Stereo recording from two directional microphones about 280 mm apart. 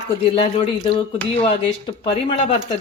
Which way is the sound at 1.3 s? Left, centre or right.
Centre.